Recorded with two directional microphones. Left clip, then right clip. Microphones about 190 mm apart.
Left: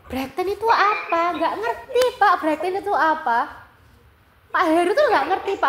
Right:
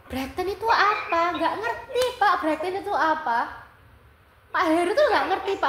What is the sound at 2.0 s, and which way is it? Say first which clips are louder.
A woman's voice: left 4 dB; 40° left (ahead or behind).